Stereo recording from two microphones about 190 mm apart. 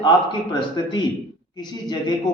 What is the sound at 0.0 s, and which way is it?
A man's voice, 25° left (ahead or behind).